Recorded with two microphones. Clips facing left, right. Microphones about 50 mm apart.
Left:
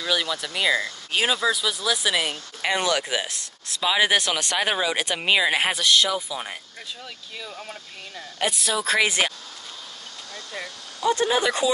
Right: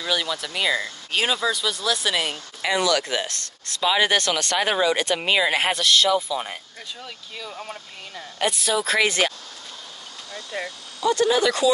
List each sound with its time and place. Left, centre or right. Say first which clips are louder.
0.0 s speech: even; centre
2.6 s speech: right 2 dB; left
2.9 s speech: right 2 dB; centre
10.3 s speech: right 4 dB; right
11.1 s speech: right 2 dB; left